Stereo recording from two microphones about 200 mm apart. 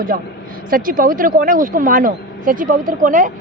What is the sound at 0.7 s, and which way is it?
Speech, 45° right (ahead or behind).